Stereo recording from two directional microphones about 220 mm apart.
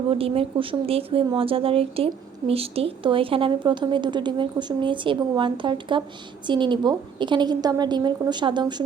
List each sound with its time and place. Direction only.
0.1 s speech: 25° right (ahead or behind)